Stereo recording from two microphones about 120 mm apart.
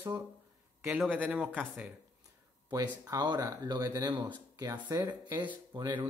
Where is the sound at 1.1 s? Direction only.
10° right (ahead or behind).